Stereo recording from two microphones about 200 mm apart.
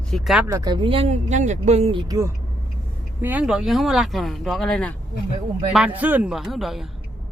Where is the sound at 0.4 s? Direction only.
15° right (ahead or behind); by 4.9 s 5° left (ahead or behind).